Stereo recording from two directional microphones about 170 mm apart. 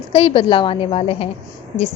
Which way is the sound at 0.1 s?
35° left (ahead or behind).